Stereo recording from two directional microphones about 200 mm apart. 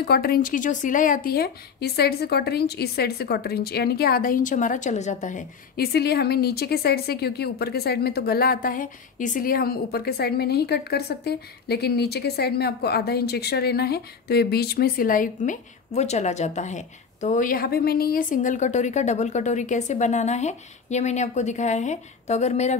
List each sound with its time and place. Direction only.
0.0 s a woman's voice: 50° left (ahead or behind); by 22.8 s 35° left (ahead or behind)